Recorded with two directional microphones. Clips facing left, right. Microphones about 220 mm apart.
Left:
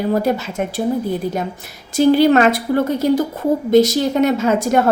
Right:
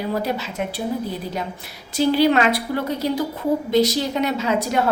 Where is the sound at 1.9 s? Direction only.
45° left (ahead or behind).